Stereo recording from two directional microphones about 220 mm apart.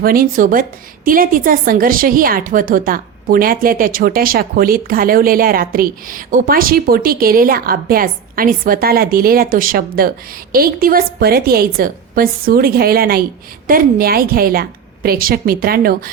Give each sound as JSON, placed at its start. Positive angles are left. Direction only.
{"t": 0.0, "sound": "a woman's voice", "side_deg": -40}